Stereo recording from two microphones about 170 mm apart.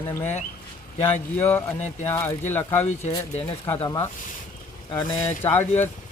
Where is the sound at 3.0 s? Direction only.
40° left (ahead or behind).